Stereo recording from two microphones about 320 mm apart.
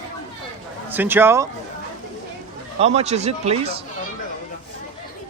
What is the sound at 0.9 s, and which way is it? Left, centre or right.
Speech, centre.